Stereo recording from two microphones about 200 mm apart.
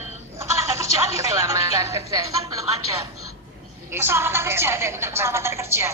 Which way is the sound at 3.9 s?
10° right (ahead or behind).